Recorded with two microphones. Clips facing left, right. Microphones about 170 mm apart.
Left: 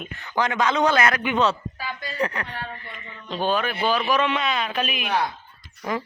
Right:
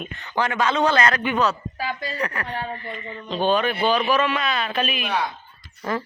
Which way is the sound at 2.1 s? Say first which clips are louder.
Left 2 dB; 20° left (ahead or behind).